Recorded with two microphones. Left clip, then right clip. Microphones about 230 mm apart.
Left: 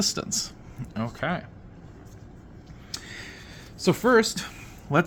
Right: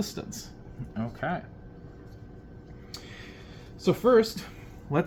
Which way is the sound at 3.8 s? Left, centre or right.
Left.